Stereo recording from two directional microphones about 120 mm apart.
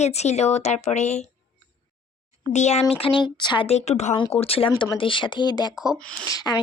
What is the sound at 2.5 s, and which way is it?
Speech, 70° left (ahead or behind).